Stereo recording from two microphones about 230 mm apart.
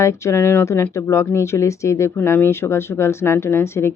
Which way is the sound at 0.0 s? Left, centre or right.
Centre.